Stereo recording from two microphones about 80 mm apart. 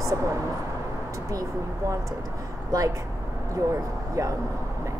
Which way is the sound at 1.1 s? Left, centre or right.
Right.